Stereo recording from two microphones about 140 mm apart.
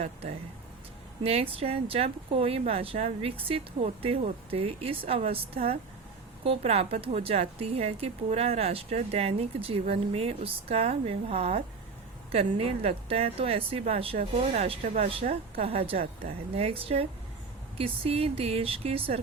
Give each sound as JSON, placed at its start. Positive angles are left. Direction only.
{"t": 0.0, "sound": "speech", "side_deg": -55}